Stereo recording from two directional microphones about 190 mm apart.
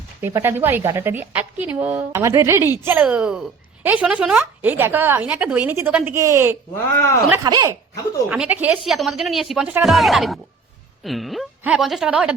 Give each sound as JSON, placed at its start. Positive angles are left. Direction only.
{"t": 0.2, "sound": "a woman's voice", "side_deg": -10}
{"t": 8.3, "sound": "speech", "side_deg": -10}